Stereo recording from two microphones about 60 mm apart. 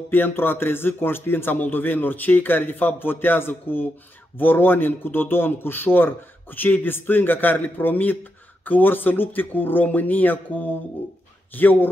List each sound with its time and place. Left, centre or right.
0.1 s a man's voice: left